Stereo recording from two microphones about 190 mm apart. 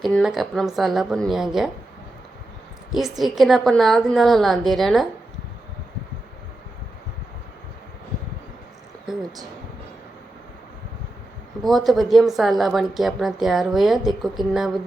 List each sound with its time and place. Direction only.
0.0 s a woman's voice: centre (ahead or behind)
2.9 s a woman's voice: centre (ahead or behind)
11.6 s a woman's voice: centre (ahead or behind)